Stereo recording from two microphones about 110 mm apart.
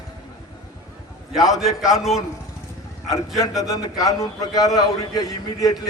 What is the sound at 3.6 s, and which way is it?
A man's voice, 35° left (ahead or behind).